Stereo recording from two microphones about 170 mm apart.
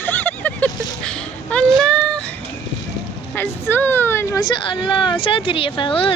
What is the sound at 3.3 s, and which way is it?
Speech, 10° left (ahead or behind).